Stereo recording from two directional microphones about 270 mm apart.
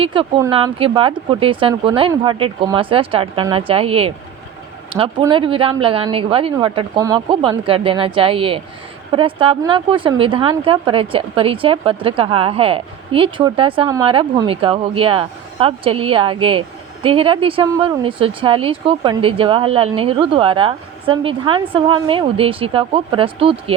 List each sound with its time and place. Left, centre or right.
0.0 s a woman's voice: centre